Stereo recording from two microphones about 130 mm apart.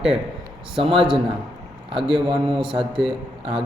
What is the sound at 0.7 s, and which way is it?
A man's voice, 45° right (ahead or behind).